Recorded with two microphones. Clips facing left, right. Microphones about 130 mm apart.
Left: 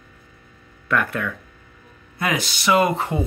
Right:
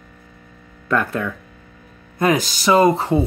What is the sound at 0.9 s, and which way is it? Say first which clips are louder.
Speech: right 2 dB; 35° right (ahead or behind).